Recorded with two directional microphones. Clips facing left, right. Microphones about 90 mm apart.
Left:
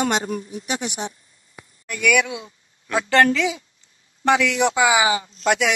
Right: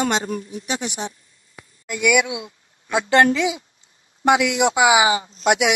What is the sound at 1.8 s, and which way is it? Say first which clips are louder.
Speech: right 1 dB; 15° right (ahead or behind).